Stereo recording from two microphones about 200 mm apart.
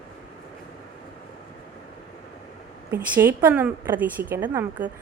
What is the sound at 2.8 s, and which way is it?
A woman's voice, 10° right (ahead or behind).